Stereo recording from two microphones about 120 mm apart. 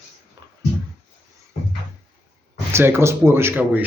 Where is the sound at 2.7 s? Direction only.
20° right (ahead or behind).